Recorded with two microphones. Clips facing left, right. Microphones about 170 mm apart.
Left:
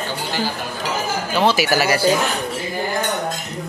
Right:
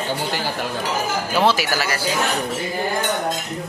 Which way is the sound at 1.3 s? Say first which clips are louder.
Left 2 dB; centre (ahead or behind).